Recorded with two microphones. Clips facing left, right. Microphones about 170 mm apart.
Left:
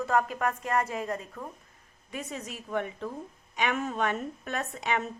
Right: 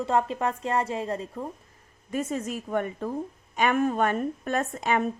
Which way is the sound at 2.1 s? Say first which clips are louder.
Right 9 dB; 45° right (ahead or behind).